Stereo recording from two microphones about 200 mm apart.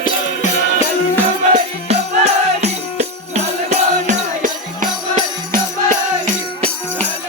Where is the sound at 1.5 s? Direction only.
35° right (ahead or behind).